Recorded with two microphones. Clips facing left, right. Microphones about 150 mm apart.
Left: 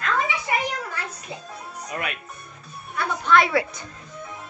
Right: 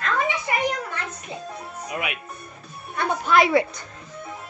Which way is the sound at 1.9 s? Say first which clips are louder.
Right 1 dB; 10° right (ahead or behind).